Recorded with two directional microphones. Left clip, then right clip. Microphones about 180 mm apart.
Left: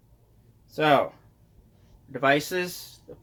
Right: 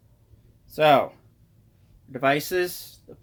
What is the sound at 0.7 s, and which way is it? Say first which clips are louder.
Speech: right 3 dB; 80° right.